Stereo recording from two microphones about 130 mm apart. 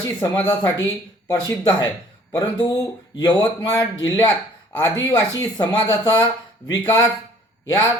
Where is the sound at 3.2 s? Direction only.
30° left (ahead or behind).